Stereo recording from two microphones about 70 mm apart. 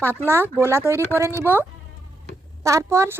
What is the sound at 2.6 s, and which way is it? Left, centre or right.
Speech, right.